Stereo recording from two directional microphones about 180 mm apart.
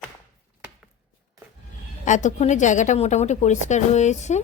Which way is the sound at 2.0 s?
45° left (ahead or behind).